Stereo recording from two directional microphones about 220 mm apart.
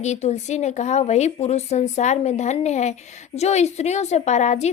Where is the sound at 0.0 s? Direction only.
30° left (ahead or behind).